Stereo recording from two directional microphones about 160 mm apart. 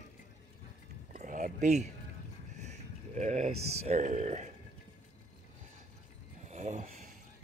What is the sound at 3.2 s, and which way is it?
Speech, 45° right (ahead or behind).